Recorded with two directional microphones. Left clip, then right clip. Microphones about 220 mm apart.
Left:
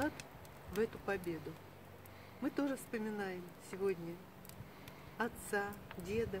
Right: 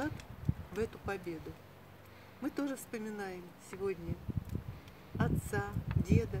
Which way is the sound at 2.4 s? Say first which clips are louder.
Even; 10° right (ahead or behind).